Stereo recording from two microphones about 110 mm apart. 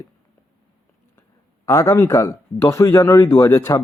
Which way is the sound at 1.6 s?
30° left (ahead or behind).